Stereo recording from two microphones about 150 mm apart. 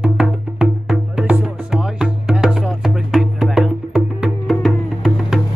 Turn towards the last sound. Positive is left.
turn(degrees=0)  # may be behind; listen again after turning